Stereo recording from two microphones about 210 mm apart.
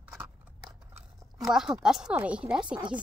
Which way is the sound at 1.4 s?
Centre (ahead or behind).